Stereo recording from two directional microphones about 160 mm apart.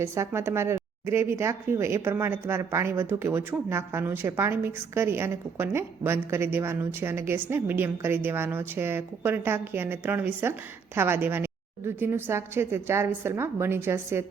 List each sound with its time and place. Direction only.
0.0 s speech: 15° right (ahead or behind)